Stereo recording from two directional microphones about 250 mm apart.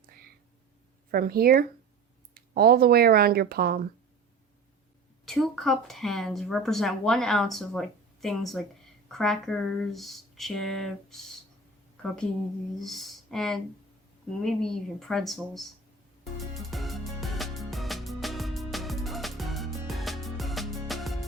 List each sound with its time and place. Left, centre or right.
1.1 s speech: right
5.2 s speech: centre
16.6 s music: centre